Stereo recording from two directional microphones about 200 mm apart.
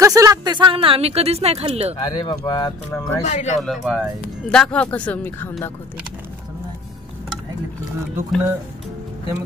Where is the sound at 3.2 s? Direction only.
35° left (ahead or behind).